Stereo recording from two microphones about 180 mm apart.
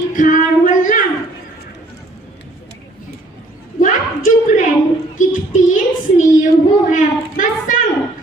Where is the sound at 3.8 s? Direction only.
45° left (ahead or behind).